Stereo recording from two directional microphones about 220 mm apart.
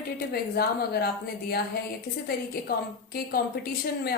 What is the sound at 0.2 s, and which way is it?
A woman's voice, 45° left (ahead or behind).